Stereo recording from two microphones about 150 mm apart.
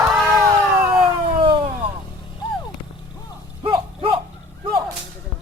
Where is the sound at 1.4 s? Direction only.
35° right (ahead or behind).